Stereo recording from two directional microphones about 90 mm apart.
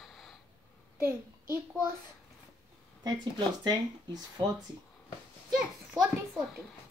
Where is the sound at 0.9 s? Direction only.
30° right (ahead or behind).